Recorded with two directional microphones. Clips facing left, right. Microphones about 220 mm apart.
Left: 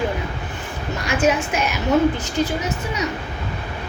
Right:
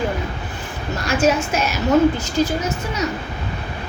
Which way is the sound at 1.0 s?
15° left (ahead or behind).